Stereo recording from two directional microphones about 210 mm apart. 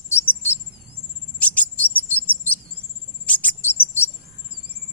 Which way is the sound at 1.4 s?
10° left (ahead or behind).